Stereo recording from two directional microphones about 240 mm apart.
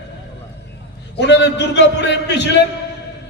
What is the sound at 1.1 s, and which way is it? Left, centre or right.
A man's voice, left.